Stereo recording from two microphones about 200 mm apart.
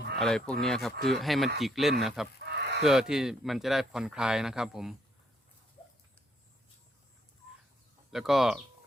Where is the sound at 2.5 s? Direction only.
55° right (ahead or behind).